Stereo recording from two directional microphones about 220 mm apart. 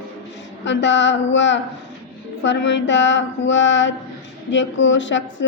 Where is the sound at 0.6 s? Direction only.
55° left (ahead or behind).